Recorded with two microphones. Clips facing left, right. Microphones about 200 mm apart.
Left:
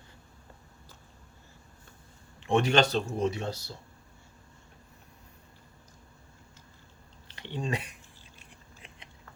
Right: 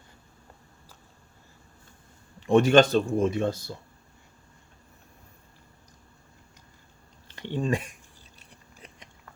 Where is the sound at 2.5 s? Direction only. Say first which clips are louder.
Right 6 dB; 45° right (ahead or behind).